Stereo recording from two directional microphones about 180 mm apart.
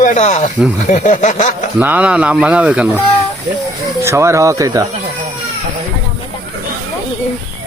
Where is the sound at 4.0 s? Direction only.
15° right (ahead or behind).